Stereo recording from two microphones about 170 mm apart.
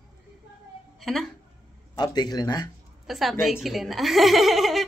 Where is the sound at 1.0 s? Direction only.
Centre (ahead or behind).